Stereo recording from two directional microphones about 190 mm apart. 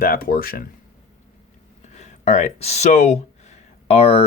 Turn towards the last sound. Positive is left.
turn(degrees=30)  # may be behind; listen again after turning